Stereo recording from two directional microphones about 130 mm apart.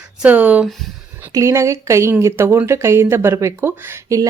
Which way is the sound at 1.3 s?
25° right (ahead or behind).